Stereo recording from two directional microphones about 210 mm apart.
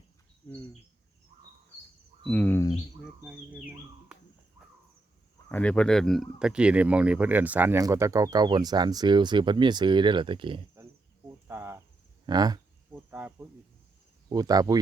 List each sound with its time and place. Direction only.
2.2 s speech: 5° left (ahead or behind)
3.0 s speech: 5° right (ahead or behind)
5.5 s speech: 5° left (ahead or behind); by 10.6 s 25° right (ahead or behind)
11.4 s cricket: 10° right (ahead or behind)
12.2 s a sound: 20° right (ahead or behind)
14.3 s speech: 20° right (ahead or behind)